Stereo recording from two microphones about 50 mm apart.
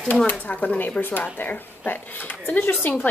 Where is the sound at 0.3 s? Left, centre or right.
Left.